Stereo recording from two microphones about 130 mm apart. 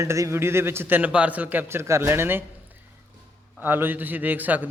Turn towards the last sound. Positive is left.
turn(degrees=-15)  # may be behind; listen again after turning